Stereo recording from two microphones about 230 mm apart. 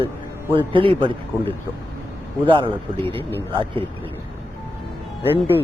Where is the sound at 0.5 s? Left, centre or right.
Right.